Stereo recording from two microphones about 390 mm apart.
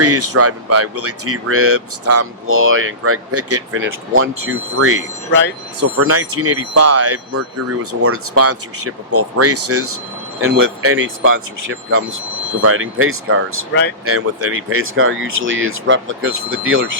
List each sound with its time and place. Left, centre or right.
0.0 s speech: right